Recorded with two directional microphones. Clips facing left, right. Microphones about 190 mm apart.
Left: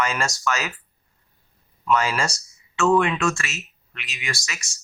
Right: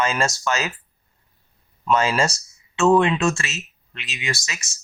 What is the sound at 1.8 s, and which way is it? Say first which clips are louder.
Speech: right 2 dB; 25° right (ahead or behind).